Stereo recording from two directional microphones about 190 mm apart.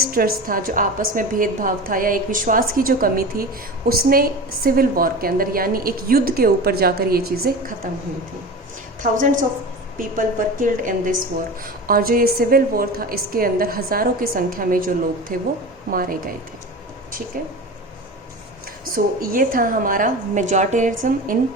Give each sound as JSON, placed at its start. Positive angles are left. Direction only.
{"t": 0.0, "sound": "a woman's voice", "side_deg": -50}
{"t": 9.0, "sound": "a woman's voice", "side_deg": -45}
{"t": 17.3, "sound": "a woman's voice", "side_deg": -45}
{"t": 19.2, "sound": "a woman's voice", "side_deg": -45}